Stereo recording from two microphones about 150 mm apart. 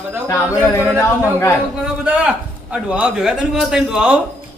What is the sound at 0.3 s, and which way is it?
Speech, 20° left (ahead or behind).